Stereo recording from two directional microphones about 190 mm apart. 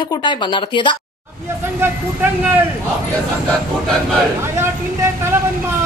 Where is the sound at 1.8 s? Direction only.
10° right (ahead or behind).